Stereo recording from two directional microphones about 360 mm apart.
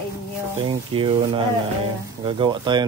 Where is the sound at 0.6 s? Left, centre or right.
Centre.